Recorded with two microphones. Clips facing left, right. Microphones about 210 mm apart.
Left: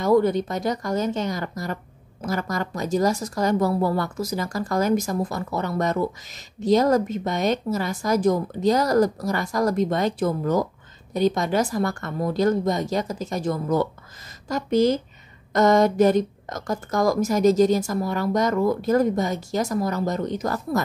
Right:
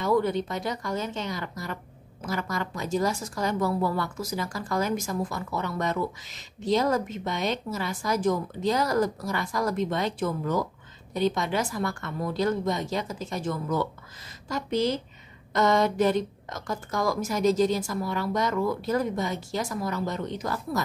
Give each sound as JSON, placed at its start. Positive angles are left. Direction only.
{"t": 0.0, "sound": "speech", "side_deg": 40}